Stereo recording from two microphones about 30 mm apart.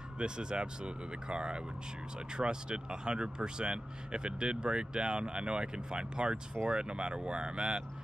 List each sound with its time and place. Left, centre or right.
0.2 s speech: right